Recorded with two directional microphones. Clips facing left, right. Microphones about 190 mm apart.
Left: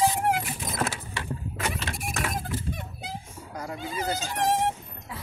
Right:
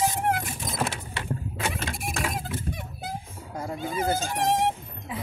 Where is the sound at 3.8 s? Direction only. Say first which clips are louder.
Right 4 dB; 50° right (ahead or behind).